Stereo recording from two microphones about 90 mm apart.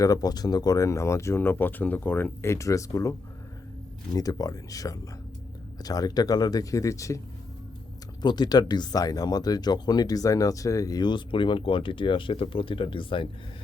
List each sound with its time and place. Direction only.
0.0 s speech: 45° left (ahead or behind)
1.4 s speech: 20° left (ahead or behind)
8.2 s speech: 55° left (ahead or behind)